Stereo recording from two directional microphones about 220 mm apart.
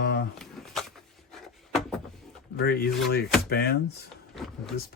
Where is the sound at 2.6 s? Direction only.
45° left (ahead or behind).